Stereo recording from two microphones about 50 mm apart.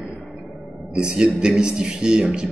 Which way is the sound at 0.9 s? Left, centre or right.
Centre.